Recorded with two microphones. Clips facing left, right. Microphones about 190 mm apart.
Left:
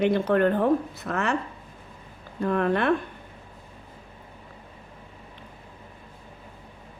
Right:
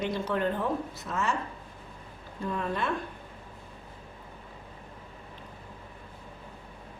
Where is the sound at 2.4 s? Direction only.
65° left (ahead or behind).